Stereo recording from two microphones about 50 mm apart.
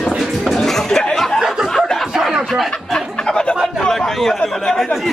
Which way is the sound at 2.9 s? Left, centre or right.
Centre.